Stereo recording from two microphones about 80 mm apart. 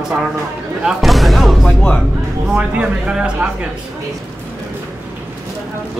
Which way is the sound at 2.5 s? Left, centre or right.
Centre.